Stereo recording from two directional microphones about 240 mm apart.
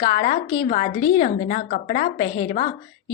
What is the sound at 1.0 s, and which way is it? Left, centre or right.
Speech, centre.